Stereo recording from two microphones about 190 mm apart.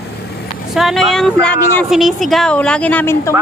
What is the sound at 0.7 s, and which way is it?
A woman's voice, centre (ahead or behind).